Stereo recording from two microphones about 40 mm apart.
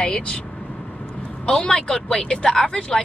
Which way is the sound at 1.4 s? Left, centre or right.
Left.